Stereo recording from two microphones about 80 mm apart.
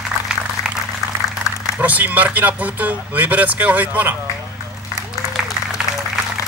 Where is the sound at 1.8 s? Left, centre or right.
Centre.